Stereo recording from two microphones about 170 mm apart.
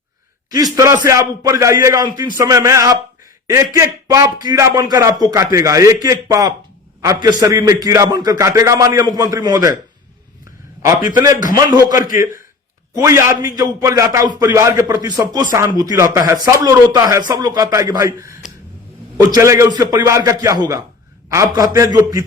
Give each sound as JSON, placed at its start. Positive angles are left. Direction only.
{"t": 0.5, "sound": "speech", "side_deg": -20}
{"t": 11.5, "sound": "a man's voice", "side_deg": -20}